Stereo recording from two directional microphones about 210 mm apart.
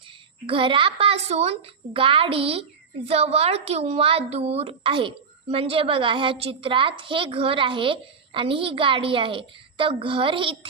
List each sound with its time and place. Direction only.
0.4 s a woman's voice: 25° right (ahead or behind)